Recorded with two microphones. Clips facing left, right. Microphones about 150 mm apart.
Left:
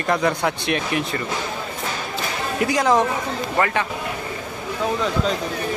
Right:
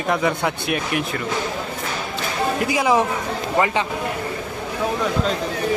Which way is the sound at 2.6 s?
5° right (ahead or behind).